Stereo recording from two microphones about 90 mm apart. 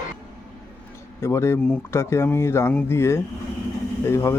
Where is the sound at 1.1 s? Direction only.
30° left (ahead or behind).